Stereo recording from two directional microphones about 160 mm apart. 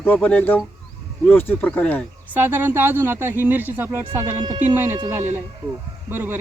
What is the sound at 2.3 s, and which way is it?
Speech, 10° right (ahead or behind).